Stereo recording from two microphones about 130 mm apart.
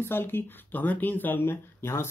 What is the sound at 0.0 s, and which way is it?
Speech, 15° left (ahead or behind).